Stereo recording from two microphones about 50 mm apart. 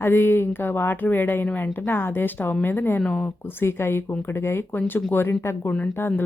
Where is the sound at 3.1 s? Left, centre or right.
Left.